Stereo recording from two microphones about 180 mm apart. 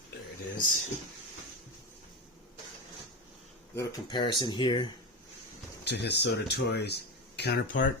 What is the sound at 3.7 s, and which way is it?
Speech, 25° left (ahead or behind).